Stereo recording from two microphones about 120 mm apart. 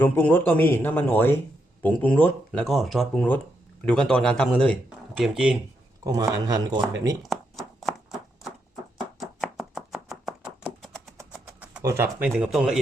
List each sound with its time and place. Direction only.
0.0 s speech: 15° left (ahead or behind); by 5.5 s 5° right (ahead or behind)
6.1 s speech: 30° right (ahead or behind)
7.2 s a sound: centre (ahead or behind)
9.2 s a sound: centre (ahead or behind)
10.9 s vehicle: centre (ahead or behind)
11.8 s speech: 30° right (ahead or behind)
12.2 s speech: 10° right (ahead or behind)